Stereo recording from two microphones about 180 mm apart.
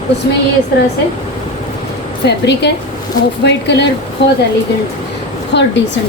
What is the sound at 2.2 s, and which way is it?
Speech, 70° left (ahead or behind).